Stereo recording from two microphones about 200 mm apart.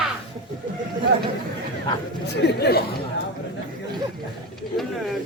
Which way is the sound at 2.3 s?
55° left (ahead or behind).